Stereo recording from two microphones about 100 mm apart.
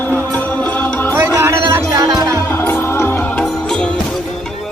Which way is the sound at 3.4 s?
10° left (ahead or behind).